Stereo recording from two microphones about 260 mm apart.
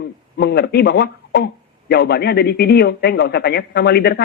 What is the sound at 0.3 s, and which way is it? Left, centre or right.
Speech, left.